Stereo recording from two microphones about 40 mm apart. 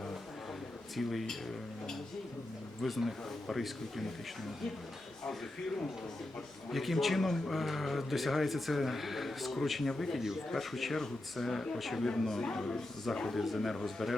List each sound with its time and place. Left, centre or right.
0.9 s speech: centre
2.8 s speech: centre
6.7 s speech: centre
11.8 s speech: centre
13.3 s speech: centre